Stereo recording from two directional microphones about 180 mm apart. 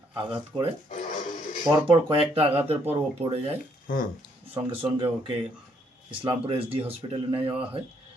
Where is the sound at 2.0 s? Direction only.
30° right (ahead or behind).